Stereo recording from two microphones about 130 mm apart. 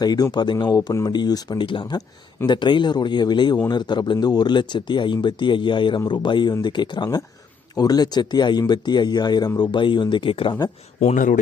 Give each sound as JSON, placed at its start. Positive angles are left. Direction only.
{"t": 0.0, "sound": "speech", "side_deg": 35}
{"t": 11.0, "sound": "speech", "side_deg": 80}